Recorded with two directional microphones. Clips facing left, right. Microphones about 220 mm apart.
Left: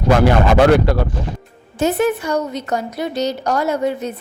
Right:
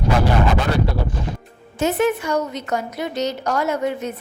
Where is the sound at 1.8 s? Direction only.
35° left (ahead or behind).